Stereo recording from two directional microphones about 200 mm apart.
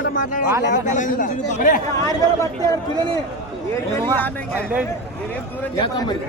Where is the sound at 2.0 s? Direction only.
15° left (ahead or behind).